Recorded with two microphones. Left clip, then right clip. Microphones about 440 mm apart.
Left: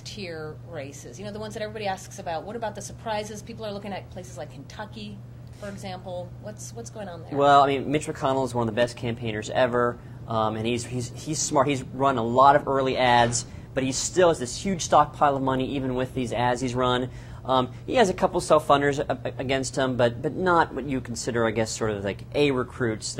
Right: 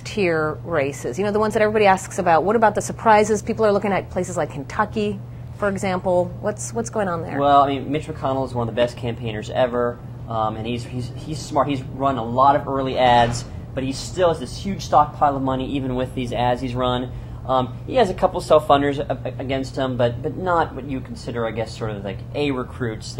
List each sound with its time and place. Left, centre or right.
0.1 s speech: right
7.3 s speech: left